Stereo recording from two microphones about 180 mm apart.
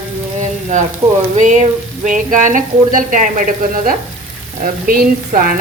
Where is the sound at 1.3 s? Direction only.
40° right (ahead or behind).